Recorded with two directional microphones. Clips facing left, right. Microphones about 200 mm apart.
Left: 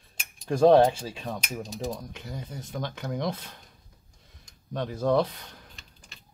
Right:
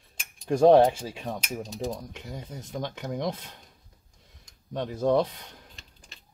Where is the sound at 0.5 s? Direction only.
15° right (ahead or behind).